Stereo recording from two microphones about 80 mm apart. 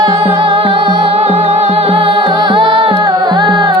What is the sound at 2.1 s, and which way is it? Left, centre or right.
Music, right.